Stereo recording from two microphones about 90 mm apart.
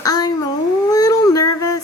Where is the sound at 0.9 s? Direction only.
45° left (ahead or behind).